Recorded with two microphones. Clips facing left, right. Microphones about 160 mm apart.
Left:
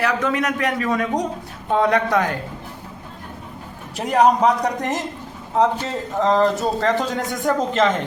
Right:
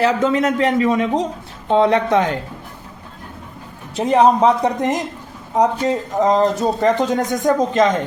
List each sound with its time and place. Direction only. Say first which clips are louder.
0.0 s speech: right 5 dB; 25° right (ahead or behind)
3.9 s speech: right 3 dB; 25° right (ahead or behind)